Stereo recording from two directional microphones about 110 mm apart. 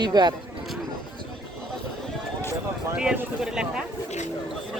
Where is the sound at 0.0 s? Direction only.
40° right (ahead or behind).